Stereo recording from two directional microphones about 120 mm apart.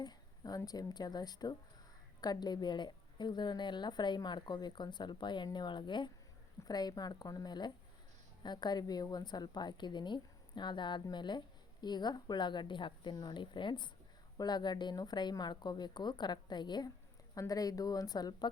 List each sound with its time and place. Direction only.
0.0 s a woman's voice: 35° left (ahead or behind)